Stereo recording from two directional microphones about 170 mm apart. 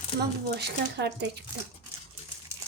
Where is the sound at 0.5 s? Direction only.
75° right (ahead or behind).